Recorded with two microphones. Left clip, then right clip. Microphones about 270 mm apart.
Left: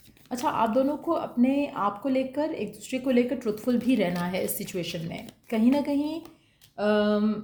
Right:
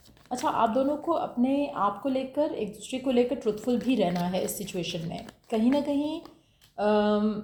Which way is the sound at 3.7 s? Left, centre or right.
Left.